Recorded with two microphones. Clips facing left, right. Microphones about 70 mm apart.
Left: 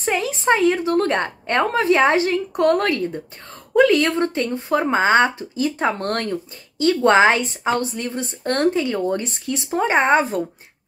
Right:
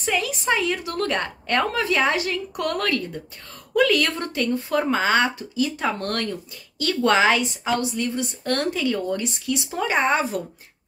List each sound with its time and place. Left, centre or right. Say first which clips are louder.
0.0 s a woman's voice: left 3 dB; left